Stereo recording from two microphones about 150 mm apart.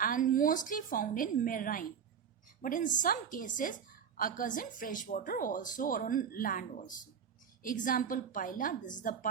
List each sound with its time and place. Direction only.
0.0 s a woman's voice: 65° left (ahead or behind)